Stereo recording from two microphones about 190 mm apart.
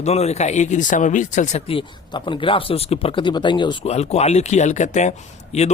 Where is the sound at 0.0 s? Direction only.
35° left (ahead or behind).